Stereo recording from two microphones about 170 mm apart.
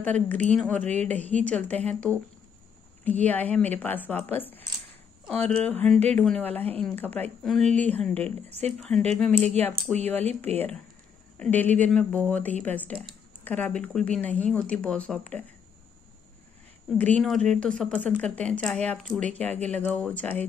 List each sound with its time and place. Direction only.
0.0 s speech: 10° left (ahead or behind)
10.5 s speech: 40° right (ahead or behind)
11.3 s speech: 10° left (ahead or behind)
17.0 s speech: 5° left (ahead or behind)